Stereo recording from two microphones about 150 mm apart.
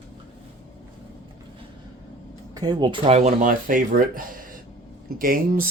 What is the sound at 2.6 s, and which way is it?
Speech, 30° right (ahead or behind).